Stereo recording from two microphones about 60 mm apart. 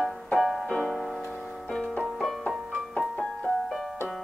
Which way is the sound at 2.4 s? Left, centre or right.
Left.